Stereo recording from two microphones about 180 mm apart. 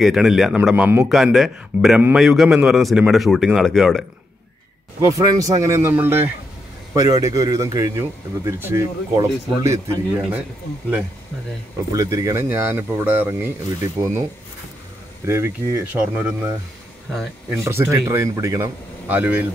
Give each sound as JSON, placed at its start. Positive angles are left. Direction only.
{"t": 0.0, "sound": "a man's voice", "side_deg": 0}
{"t": 5.0, "sound": "a man's voice", "side_deg": -20}
{"t": 11.9, "sound": "speech", "side_deg": -20}
{"t": 15.2, "sound": "speech", "side_deg": -15}
{"t": 17.5, "sound": "speech", "side_deg": -15}